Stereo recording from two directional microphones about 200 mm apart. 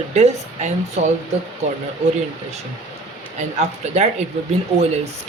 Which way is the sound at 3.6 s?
35° right (ahead or behind).